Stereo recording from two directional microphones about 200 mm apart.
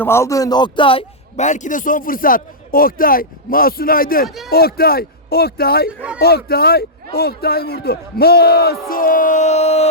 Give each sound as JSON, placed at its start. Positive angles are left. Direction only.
{"t": 0.0, "sound": "a man's voice", "side_deg": 15}